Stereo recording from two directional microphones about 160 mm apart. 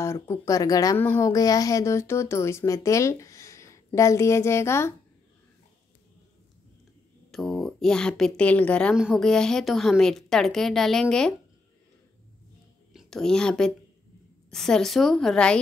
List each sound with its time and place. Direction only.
0.0 s a woman's voice: 15° left (ahead or behind)
7.2 s a woman's voice: centre (ahead or behind)
12.9 s a woman's voice: 5° left (ahead or behind)